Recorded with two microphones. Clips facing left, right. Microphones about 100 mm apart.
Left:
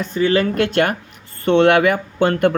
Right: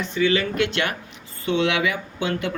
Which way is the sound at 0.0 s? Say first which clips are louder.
Left 4 dB; 45° left (ahead or behind).